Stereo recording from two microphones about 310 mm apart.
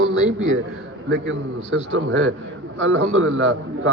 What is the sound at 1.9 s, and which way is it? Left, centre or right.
Speech, right.